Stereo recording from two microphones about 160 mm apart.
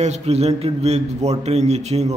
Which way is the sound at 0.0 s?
45° right (ahead or behind).